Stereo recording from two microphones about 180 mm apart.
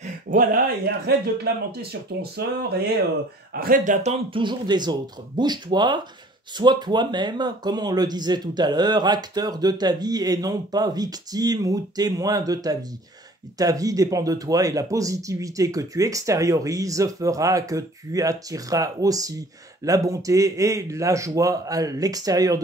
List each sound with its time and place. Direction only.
0.0 s a sound: 45° right (ahead or behind)
0.8 s speech: 65° right (ahead or behind)
3.5 s speech: 50° right (ahead or behind); by 22.6 s 20° right (ahead or behind)